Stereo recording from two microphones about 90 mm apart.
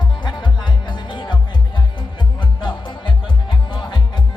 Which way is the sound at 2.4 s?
65° left (ahead or behind).